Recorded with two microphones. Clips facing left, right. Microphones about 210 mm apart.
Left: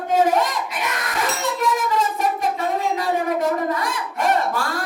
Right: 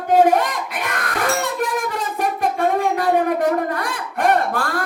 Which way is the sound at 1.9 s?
50° right (ahead or behind).